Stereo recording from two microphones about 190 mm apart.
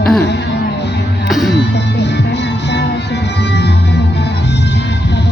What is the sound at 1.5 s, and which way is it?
Music, 65° left (ahead or behind).